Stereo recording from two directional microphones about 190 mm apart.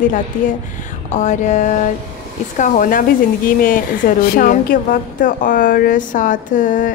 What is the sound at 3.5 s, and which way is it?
Speech, 45° left (ahead or behind).